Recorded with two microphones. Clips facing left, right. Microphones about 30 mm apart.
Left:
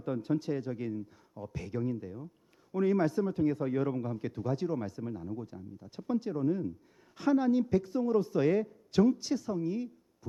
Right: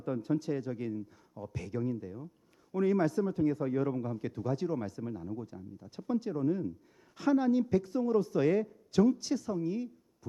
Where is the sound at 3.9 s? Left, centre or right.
Centre.